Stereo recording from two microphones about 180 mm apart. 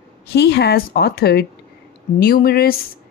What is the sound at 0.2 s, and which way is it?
Speech, 65° left (ahead or behind).